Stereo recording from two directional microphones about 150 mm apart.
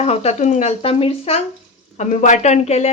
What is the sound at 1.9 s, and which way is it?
Speech, 55° left (ahead or behind).